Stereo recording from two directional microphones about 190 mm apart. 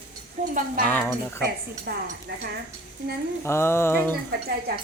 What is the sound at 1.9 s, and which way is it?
Speech, 55° right (ahead or behind).